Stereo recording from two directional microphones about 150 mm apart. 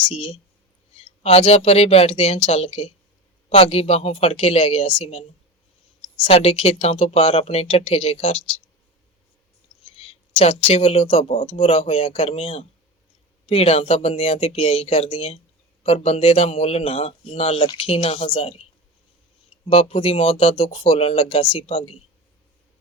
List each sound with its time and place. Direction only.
0.0 s speech: 35° left (ahead or behind)
6.2 s speech: 45° left (ahead or behind)
9.8 s speech: 40° left (ahead or behind)
19.7 s speech: 40° left (ahead or behind)